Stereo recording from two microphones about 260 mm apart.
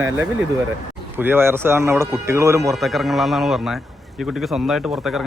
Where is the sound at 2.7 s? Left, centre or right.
Centre.